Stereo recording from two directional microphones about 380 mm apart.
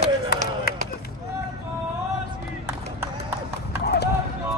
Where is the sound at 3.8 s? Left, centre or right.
Left.